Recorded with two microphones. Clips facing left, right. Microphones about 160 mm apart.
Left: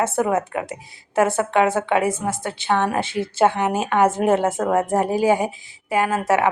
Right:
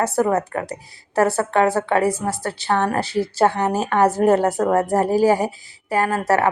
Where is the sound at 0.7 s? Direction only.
20° left (ahead or behind).